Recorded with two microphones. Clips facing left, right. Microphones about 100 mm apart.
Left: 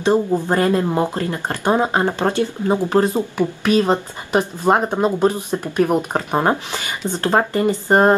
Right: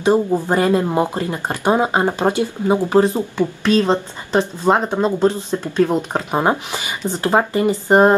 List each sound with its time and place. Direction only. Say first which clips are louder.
0.0 s speech: right 1 dB; 15° right (ahead or behind)
3.2 s speech: even; 15° left (ahead or behind)
6.3 s speech: right 1 dB; 20° right (ahead or behind)